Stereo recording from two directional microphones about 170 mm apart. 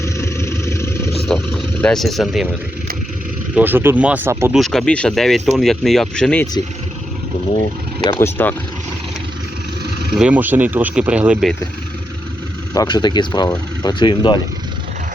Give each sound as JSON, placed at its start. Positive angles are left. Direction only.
{"t": 0.0, "sound": "vehicle", "side_deg": 15}
{"t": 1.5, "sound": "speech", "side_deg": 0}
{"t": 3.5, "sound": "speech", "side_deg": -10}
{"t": 4.5, "sound": "speech", "side_deg": 0}
{"t": 8.1, "sound": "speech", "side_deg": 10}
{"t": 10.2, "sound": "speech", "side_deg": -10}
{"t": 12.7, "sound": "speech", "side_deg": 25}